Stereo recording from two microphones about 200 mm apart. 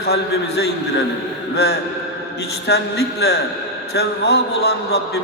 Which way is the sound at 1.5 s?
55° left (ahead or behind).